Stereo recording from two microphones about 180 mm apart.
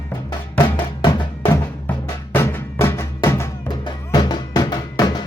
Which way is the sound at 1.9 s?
10° left (ahead or behind).